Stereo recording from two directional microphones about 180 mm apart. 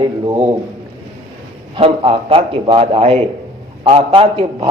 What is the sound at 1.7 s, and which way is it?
A man's voice, 30° right (ahead or behind).